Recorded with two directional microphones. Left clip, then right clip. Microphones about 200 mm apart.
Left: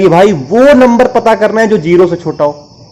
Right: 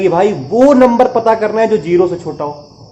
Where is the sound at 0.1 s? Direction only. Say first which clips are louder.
Left 6 dB; 35° left (ahead or behind).